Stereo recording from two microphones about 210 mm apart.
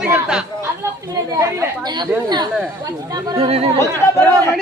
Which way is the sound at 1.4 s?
15° right (ahead or behind).